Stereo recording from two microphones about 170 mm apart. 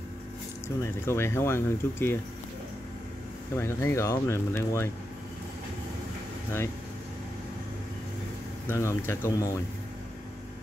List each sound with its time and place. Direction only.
0.7 s speech: 15° left (ahead or behind)
3.5 s speech: 15° left (ahead or behind)
8.6 s speech: 15° left (ahead or behind)